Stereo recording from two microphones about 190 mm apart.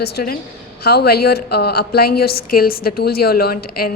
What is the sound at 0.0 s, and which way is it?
A woman's voice, 55° left (ahead or behind).